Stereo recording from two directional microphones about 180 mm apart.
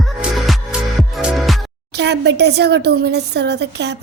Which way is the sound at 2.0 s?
70° right (ahead or behind).